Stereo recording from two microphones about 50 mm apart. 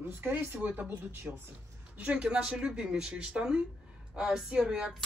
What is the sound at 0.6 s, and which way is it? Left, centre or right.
Speech, right.